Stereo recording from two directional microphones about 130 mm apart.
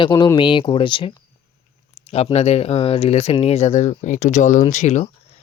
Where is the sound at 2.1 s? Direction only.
50° left (ahead or behind).